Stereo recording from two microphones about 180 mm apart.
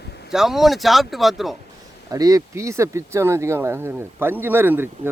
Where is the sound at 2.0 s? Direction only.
20° right (ahead or behind).